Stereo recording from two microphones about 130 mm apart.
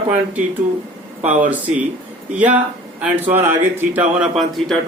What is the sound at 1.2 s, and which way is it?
Speech, 10° right (ahead or behind).